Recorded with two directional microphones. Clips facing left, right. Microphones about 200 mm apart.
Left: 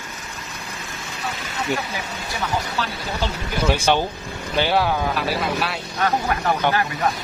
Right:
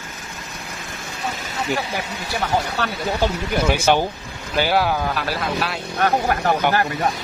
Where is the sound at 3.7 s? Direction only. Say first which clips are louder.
Even; 10° right (ahead or behind).